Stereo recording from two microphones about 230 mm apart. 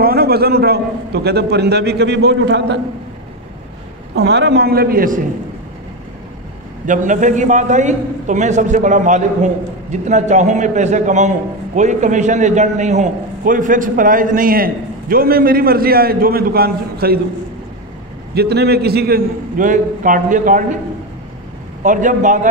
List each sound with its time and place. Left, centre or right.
0.0 s a man's voice: right
4.1 s a man's voice: right
6.9 s a man's voice: right
18.3 s a man's voice: right
21.8 s a man's voice: right